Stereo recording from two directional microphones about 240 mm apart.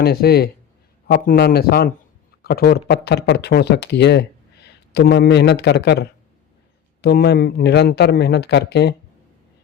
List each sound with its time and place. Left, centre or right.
0.0 s a man's voice: left